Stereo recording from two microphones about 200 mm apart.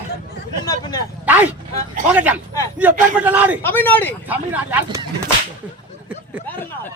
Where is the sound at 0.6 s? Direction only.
20° left (ahead or behind).